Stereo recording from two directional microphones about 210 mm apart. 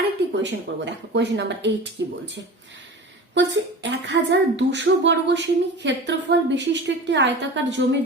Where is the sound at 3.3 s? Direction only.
55° right (ahead or behind).